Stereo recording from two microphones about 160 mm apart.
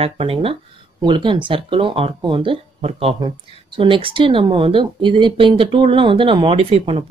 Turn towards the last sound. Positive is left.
turn(degrees=-35)  # may be behind; listen again after turning